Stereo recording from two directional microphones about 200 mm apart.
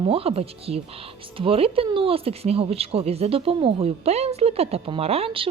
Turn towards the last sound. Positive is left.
turn(degrees=-30)  # may be behind; listen again after turning